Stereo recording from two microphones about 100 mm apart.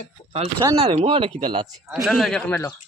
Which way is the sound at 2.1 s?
5° left (ahead or behind).